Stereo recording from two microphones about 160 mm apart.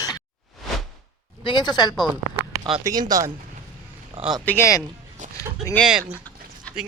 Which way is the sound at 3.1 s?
20° right (ahead or behind).